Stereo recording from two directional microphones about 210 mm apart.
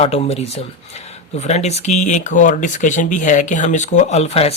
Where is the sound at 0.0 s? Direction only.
30° left (ahead or behind).